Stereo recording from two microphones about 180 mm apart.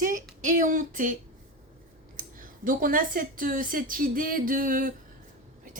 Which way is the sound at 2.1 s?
50° right (ahead or behind).